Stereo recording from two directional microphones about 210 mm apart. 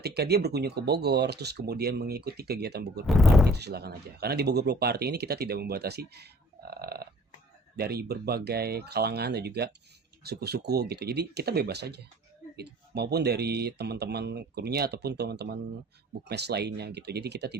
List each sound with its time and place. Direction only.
0.0 s speech: 50° right (ahead or behind)
3.1 s speech: centre (ahead or behind)
3.6 s speech: 50° right (ahead or behind)